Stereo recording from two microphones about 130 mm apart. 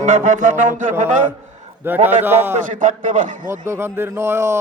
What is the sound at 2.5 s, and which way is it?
Speech, 80° right.